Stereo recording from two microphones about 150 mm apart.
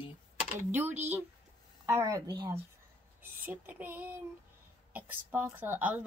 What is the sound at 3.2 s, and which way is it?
A woman's voice, 15° right (ahead or behind).